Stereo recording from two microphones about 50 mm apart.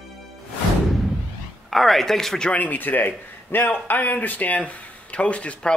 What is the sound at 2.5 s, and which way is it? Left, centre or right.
A man's voice, left.